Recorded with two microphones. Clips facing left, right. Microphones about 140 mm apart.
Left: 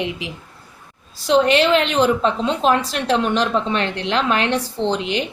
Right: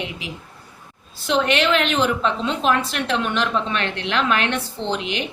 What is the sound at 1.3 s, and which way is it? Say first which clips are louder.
A woman's voice: left 4 dB; 35° left (ahead or behind).